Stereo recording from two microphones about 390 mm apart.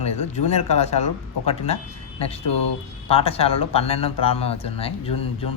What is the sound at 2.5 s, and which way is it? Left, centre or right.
Speech, left.